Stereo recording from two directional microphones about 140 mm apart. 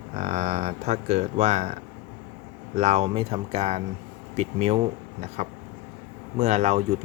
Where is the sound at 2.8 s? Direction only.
50° right (ahead or behind).